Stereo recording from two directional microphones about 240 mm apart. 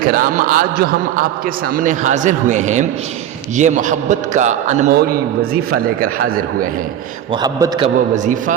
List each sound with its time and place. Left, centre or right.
0.0 s a man's voice: right
4.9 s a man's voice: right
7.4 s a man's voice: centre
8.1 s a man's voice: right